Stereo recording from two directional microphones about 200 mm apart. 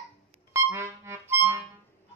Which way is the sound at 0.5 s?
15° right (ahead or behind).